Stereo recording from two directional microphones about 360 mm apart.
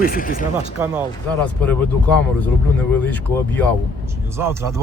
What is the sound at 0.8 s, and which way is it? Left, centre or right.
Speech, centre.